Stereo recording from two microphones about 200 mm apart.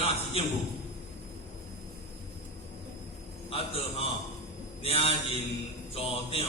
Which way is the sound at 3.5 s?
30° left (ahead or behind).